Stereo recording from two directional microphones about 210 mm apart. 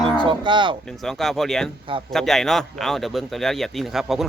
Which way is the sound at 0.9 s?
Centre (ahead or behind).